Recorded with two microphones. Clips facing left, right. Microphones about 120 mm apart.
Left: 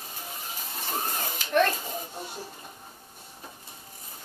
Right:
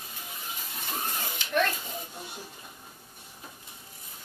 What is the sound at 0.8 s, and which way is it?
Children playing, 40° left (ahead or behind).